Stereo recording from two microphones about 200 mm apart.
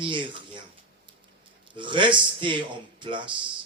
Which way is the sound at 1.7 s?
25° right (ahead or behind).